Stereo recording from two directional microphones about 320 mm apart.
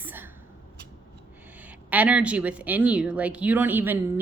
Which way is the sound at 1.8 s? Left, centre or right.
Centre.